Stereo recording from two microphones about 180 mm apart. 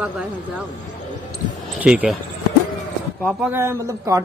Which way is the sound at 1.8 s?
5° right (ahead or behind).